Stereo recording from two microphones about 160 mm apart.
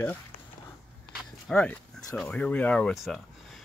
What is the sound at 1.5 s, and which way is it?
Speech, 5° left (ahead or behind).